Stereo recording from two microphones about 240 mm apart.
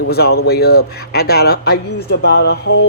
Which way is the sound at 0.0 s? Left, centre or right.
Left.